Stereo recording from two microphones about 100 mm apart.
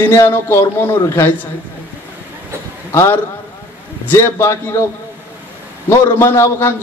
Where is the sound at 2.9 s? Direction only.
25° left (ahead or behind).